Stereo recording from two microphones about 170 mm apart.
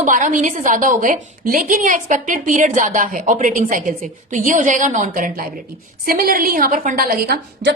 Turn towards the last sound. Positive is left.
turn(degrees=-70)  # may be behind; listen again after turning